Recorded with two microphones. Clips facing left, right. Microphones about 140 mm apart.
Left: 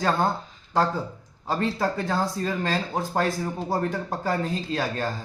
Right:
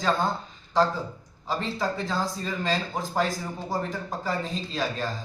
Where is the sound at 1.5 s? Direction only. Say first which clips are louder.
Left 3 dB; 55° left (ahead or behind).